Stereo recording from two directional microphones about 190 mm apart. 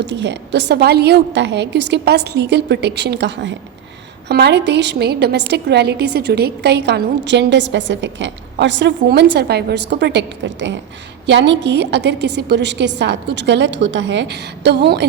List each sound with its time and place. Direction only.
0.0 s a woman's voice: 70° right (ahead or behind)